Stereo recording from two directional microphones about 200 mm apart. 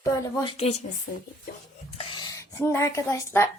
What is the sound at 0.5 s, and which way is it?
Speech, 35° left (ahead or behind).